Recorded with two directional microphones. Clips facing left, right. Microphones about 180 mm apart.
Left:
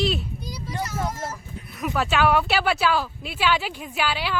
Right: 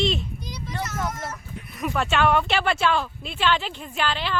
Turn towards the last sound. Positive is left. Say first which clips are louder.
# left 1 dB
turn(degrees=10)  # may be behind; listen again after turning